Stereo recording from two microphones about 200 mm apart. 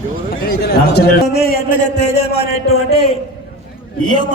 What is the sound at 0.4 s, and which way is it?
A man's voice, 50° left (ahead or behind).